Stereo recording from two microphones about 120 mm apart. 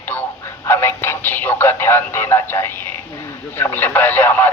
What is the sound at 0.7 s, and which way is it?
Music, 20° left (ahead or behind).